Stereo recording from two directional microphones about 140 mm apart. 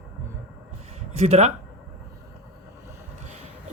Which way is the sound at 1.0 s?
50° right (ahead or behind).